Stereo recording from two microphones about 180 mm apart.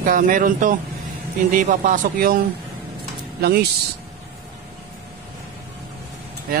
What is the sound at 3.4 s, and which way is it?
Speech, 60° right (ahead or behind).